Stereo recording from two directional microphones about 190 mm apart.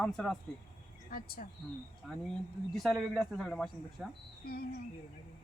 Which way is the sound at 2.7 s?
Centre (ahead or behind).